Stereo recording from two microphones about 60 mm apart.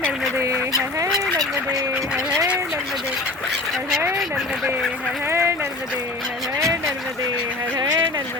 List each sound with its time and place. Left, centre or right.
0.3 s goose: right
4.2 s a sound: centre
5.3 s boat: right